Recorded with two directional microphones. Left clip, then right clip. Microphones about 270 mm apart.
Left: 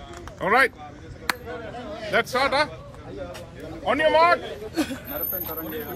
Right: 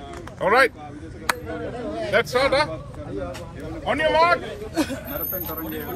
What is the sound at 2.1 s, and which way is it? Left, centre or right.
Speech, centre.